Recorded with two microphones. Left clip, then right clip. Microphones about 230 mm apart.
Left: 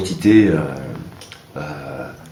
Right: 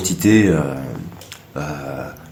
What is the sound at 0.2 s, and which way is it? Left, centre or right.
Speech, right.